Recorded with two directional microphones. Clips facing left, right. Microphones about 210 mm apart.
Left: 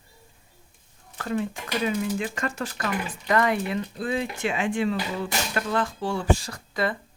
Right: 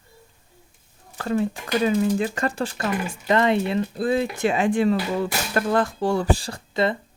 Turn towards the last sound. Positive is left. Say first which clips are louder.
# right 5 dB
turn(degrees=-25)  # may be behind; listen again after turning